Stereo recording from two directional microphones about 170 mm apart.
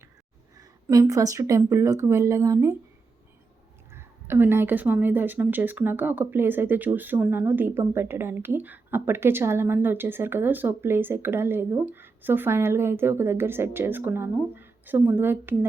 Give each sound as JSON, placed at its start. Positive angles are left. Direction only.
{"t": 0.5, "sound": "speech", "side_deg": -20}
{"t": 3.9, "sound": "a woman's voice", "side_deg": -15}